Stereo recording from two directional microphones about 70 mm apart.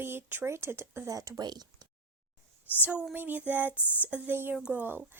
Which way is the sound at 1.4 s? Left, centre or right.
Right.